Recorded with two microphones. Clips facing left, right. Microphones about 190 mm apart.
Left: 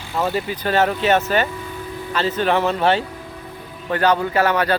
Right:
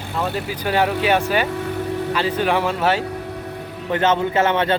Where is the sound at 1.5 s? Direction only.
70° right (ahead or behind).